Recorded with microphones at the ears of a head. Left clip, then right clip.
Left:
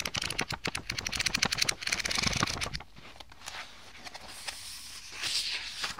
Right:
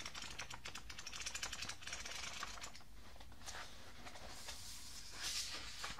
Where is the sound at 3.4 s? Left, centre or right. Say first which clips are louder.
Left 9 dB; left.